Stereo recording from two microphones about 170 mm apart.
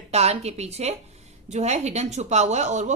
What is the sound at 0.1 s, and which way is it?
Speech, 40° right (ahead or behind).